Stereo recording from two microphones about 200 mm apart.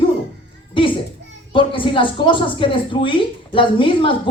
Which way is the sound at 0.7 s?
25° left (ahead or behind).